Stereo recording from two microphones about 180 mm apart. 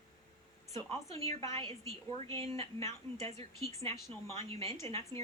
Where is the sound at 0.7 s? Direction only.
15° left (ahead or behind).